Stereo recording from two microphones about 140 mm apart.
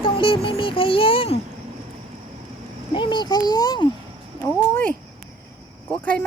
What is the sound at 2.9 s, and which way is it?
Speech, 35° left (ahead or behind).